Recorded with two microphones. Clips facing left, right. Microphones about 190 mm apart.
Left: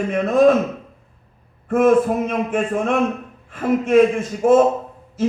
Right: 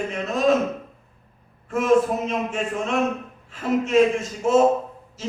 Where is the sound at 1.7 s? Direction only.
55° left (ahead or behind).